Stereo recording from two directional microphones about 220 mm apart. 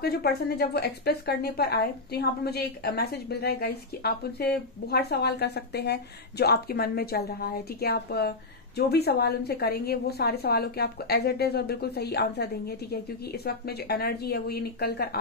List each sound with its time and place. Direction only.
0.0 s speech: 45° left (ahead or behind)